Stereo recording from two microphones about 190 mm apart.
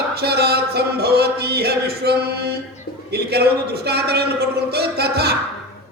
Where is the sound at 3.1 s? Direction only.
55° right (ahead or behind).